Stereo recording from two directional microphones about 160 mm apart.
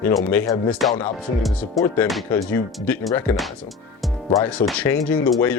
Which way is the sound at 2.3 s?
10° left (ahead or behind).